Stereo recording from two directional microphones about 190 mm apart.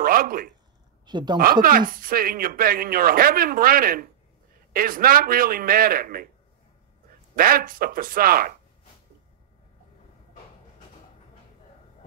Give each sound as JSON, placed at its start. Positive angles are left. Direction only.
{"t": 0.0, "sound": "a sound", "side_deg": -50}
{"t": 1.0, "sound": "speech", "side_deg": -25}
{"t": 1.4, "sound": "speech", "side_deg": -50}
{"t": 7.3, "sound": "speech", "side_deg": -50}